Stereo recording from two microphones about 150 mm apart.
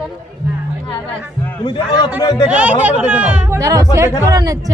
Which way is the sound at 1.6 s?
30° left (ahead or behind).